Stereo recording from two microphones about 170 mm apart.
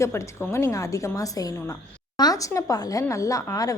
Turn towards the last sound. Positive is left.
turn(degrees=20)  # may be behind; listen again after turning